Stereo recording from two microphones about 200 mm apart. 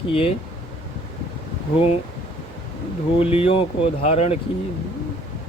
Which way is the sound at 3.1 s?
30° left (ahead or behind).